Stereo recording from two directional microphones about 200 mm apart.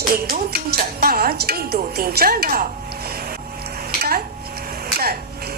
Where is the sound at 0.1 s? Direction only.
50° right (ahead or behind).